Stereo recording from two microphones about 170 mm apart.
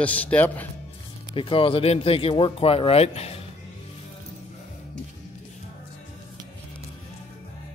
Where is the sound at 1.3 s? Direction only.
30° left (ahead or behind).